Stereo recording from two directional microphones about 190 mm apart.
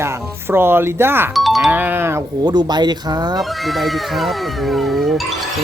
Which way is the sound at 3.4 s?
Centre (ahead or behind).